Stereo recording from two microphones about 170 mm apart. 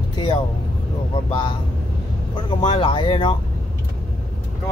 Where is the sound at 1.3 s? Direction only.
30° left (ahead or behind).